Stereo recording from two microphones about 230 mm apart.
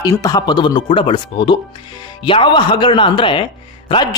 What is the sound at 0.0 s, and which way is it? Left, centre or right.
A man's voice, centre.